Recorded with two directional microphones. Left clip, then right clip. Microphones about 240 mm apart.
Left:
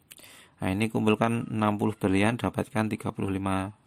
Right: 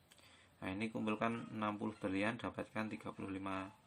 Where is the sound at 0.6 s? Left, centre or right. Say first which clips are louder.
Left 15 dB; left.